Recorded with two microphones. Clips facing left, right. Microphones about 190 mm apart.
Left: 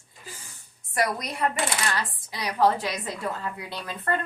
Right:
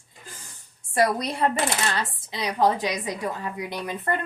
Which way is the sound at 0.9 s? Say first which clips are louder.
Right 4 dB; 30° right (ahead or behind).